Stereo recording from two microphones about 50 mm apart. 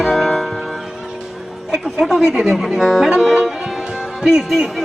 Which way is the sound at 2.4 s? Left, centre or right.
Centre.